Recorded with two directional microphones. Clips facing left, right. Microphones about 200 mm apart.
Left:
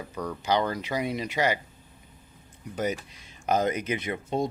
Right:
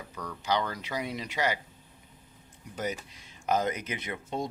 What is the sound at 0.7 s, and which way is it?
Speech, 10° left (ahead or behind).